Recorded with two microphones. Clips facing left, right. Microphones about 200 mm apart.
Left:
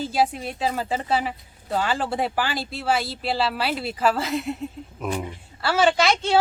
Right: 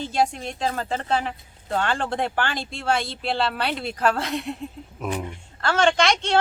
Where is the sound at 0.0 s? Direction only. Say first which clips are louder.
Left 1 dB; 5° left (ahead or behind).